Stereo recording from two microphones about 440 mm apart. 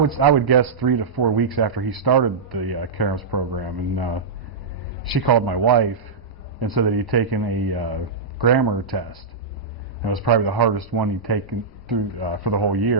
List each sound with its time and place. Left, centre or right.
0.0 s speech: right
10.2 s a man's voice: right